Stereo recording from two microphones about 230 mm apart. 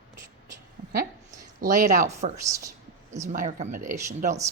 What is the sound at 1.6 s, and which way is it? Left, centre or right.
A woman's voice, right.